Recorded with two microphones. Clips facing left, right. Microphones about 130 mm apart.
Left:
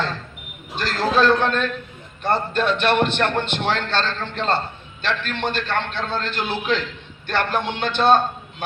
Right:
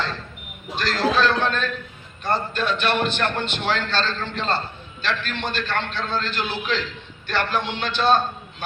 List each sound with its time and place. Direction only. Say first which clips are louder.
0.8 s a man's voice: left 1 dB; 50° left (ahead or behind)